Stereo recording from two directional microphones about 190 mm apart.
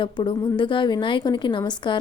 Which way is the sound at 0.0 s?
25° left (ahead or behind).